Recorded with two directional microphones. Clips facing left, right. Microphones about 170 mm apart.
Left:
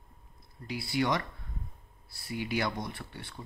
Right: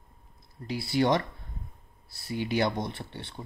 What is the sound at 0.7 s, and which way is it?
Speech, 30° right (ahead or behind).